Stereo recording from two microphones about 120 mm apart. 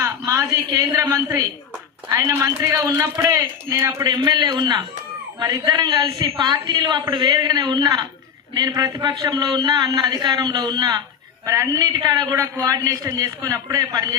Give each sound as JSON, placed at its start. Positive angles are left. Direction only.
{"t": 0.0, "sound": "a woman's voice", "side_deg": -25}